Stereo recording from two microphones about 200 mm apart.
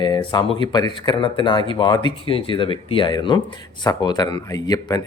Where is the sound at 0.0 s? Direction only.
20° left (ahead or behind).